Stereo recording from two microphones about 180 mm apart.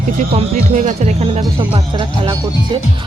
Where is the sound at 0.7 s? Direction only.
45° right (ahead or behind).